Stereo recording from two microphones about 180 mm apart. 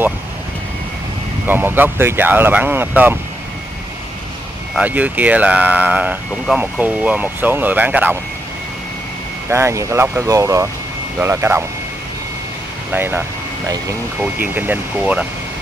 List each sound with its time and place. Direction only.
1.5 s speech: 10° right (ahead or behind)
4.7 s speech: 10° right (ahead or behind)
9.5 s speech: 15° right (ahead or behind)
12.9 s speech: 10° right (ahead or behind)
14.2 s speech: 10° right (ahead or behind)